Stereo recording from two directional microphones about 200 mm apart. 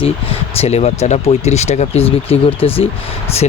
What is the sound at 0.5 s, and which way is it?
Speech, 30° left (ahead or behind).